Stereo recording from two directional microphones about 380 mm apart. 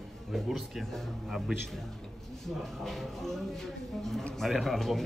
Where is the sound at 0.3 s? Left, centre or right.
Centre.